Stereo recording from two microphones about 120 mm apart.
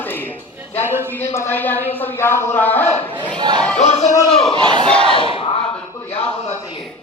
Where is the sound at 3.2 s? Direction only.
40° right (ahead or behind).